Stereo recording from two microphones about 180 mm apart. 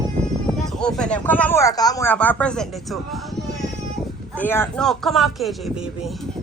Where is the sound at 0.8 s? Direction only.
5° left (ahead or behind).